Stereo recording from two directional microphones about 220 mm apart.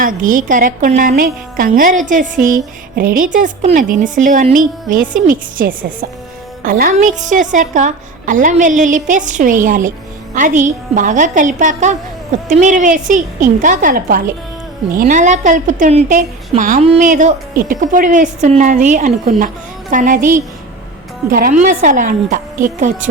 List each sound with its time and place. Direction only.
0.0 s a woman's voice: 40° right (ahead or behind)